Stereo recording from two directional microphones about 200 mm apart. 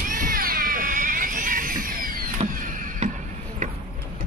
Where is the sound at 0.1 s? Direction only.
45° right (ahead or behind).